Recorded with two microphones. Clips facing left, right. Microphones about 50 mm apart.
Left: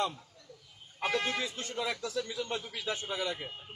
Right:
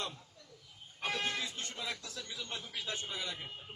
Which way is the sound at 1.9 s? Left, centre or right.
Left.